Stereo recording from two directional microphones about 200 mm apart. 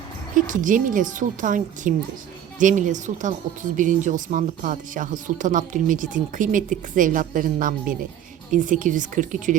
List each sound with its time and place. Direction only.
0.3 s speech: 40° right (ahead or behind)